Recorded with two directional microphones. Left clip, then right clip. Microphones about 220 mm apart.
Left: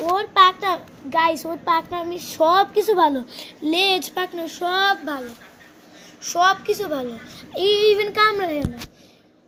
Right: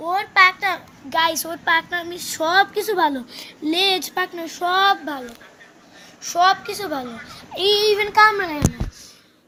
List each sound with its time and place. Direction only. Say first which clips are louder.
0.1 s a woman's voice: even; 45° right (ahead or behind); by 3.2 s 25° right (ahead or behind)
3.3 s speech: even; 10° right (ahead or behind)
6.2 s speech: right 1 dB; 15° right (ahead or behind)
6.5 s a woman's voice: left 1 dB; 45° right (ahead or behind)
7.5 s speech: left 1 dB; 15° right (ahead or behind)